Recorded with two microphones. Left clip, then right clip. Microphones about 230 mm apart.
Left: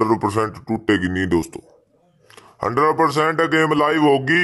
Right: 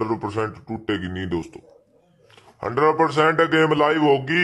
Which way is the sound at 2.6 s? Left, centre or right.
Left.